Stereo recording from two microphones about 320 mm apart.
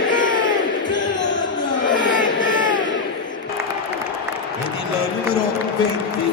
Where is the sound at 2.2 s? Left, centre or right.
Left.